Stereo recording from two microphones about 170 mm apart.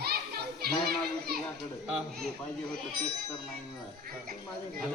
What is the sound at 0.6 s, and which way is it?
Speech, 65° right (ahead or behind).